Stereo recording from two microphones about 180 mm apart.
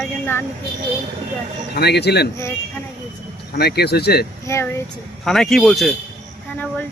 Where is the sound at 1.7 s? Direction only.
65° left (ahead or behind).